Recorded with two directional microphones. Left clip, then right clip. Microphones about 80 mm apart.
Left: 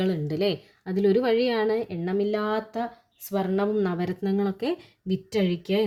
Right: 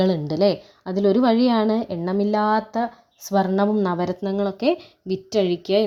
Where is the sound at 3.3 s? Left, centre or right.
Right.